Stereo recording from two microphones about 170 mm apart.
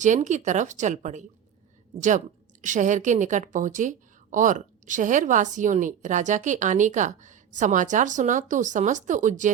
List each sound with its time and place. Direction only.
0.0 s a woman's voice: 45° right (ahead or behind)